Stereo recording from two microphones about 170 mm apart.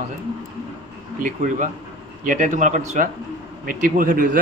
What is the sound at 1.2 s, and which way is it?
A man's voice, 50° right (ahead or behind).